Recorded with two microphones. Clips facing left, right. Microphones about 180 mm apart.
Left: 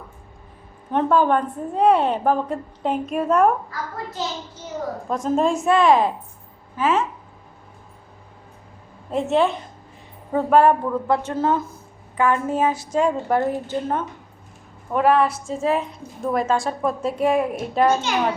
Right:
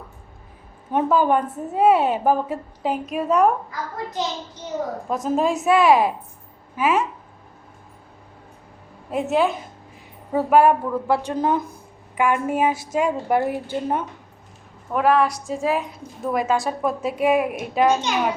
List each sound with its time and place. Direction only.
0.9 s a woman's voice: 10° right (ahead or behind)
3.7 s a child's voice: 20° right (ahead or behind)
5.0 s a woman's voice: 5° right (ahead or behind)
9.0 s a woman's voice: 5° right (ahead or behind)
14.9 s a woman's voice: centre (ahead or behind)